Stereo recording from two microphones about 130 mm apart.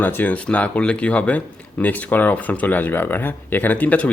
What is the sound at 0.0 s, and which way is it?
Speech, 15° left (ahead or behind).